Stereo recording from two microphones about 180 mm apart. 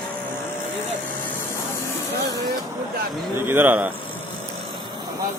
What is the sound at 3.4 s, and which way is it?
Bird, 10° right (ahead or behind).